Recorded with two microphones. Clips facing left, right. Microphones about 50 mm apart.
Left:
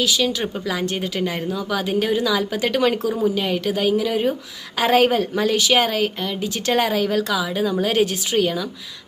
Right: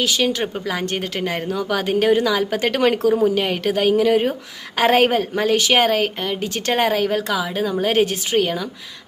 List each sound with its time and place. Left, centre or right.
0.0 s a woman's voice: right